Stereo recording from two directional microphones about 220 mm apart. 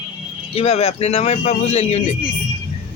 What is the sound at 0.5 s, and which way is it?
A man's voice, 30° left (ahead or behind).